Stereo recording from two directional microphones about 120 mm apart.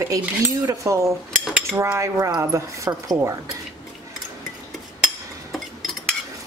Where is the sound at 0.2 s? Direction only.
20° right (ahead or behind).